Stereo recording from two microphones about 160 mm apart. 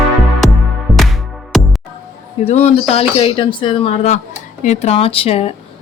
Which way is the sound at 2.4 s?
45° left (ahead or behind).